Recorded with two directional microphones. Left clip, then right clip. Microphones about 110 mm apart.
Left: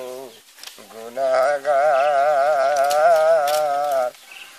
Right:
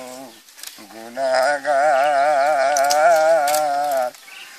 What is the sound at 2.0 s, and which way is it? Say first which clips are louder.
Music: right 1 dB; 5° left (ahead or behind).